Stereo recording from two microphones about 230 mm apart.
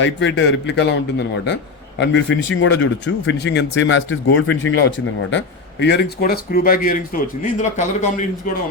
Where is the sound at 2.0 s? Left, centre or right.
Left.